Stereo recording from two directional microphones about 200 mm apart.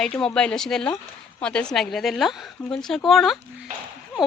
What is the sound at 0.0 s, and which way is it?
A woman's voice, 5° left (ahead or behind).